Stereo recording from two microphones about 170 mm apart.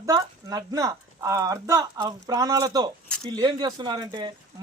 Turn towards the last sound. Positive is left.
turn(degrees=-25)  # may be behind; listen again after turning